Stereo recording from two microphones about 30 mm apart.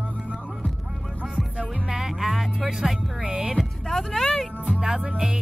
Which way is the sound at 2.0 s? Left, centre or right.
Centre.